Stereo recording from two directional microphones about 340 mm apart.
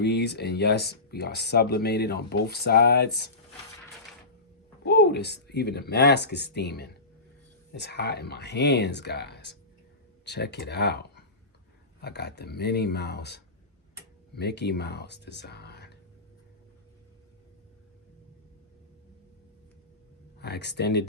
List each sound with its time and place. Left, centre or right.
0.0 s speech: left
4.8 s speech: left
20.4 s speech: left